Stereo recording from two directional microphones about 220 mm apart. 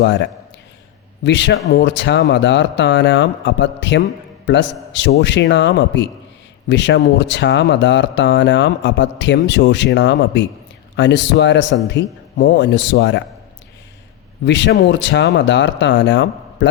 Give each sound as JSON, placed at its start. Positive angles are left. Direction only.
{"t": 0.0, "sound": "speech", "side_deg": 55}
{"t": 14.4, "sound": "speech", "side_deg": 55}